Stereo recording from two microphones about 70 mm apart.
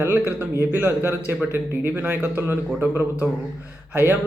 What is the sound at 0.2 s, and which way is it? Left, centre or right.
A man's voice, right.